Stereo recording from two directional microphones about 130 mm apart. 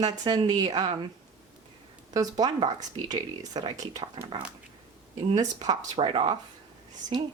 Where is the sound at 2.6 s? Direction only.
35° right (ahead or behind).